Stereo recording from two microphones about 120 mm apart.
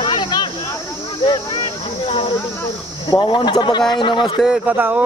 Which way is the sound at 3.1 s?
45° left (ahead or behind).